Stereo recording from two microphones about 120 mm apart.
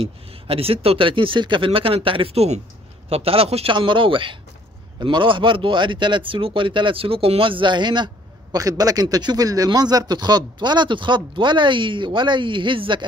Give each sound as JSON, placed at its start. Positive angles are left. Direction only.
{"t": 0.0, "sound": "a man's voice", "side_deg": -50}
{"t": 3.7, "sound": "a man's voice", "side_deg": -45}